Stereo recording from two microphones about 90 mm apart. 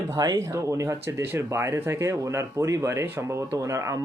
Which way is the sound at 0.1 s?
45° right (ahead or behind).